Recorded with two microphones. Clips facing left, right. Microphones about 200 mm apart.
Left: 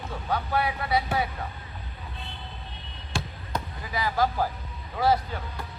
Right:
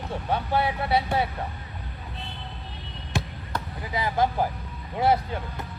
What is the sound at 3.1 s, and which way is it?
Basketball bounce, 20° right (ahead or behind).